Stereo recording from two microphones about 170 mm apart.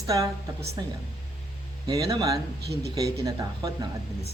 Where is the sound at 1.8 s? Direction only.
20° right (ahead or behind).